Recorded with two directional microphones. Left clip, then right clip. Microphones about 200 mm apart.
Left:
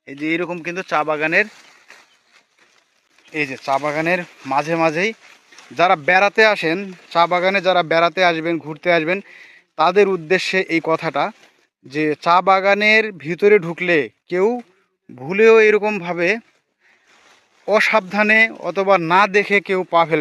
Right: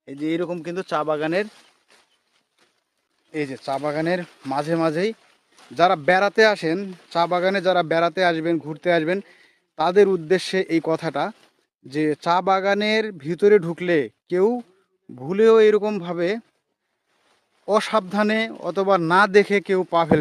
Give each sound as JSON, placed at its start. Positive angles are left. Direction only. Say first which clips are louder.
{"t": 0.0, "sound": "speech", "louder": "left 3 dB", "side_deg": -10}
{"t": 3.3, "sound": "speech", "louder": "left 6 dB", "side_deg": -5}
{"t": 17.7, "sound": "speech", "louder": "left 5 dB", "side_deg": -15}